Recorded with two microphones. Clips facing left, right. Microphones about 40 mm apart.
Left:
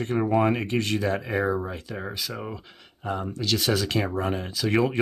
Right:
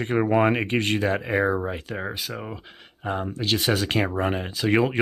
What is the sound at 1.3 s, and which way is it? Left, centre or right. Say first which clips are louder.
Speech: right 3 dB; right.